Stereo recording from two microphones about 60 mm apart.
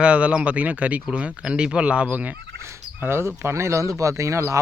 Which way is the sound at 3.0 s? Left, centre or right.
Right.